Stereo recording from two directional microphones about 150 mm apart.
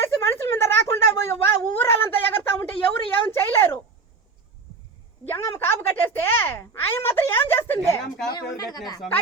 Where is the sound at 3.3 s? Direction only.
15° left (ahead or behind).